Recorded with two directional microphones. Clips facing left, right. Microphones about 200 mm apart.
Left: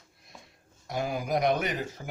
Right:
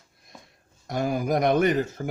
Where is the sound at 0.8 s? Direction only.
45° right (ahead or behind).